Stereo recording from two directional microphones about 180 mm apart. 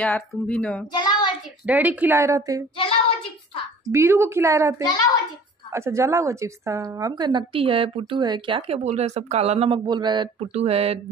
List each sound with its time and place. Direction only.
0.0 s speech: 10° left (ahead or behind)
0.9 s child singing: 25° left (ahead or behind)
1.7 s a woman's voice: 10° right (ahead or behind)
3.9 s a woman's voice: 15° right (ahead or behind)
4.8 s a child's voice: 20° left (ahead or behind)
5.7 s a woman's voice: 15° right (ahead or behind); by 11.0 s 35° right (ahead or behind)